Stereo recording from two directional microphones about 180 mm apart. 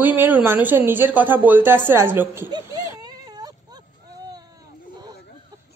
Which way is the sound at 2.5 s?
25° right (ahead or behind).